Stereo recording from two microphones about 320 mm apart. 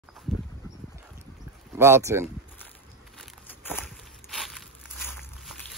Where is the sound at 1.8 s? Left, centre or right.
Centre.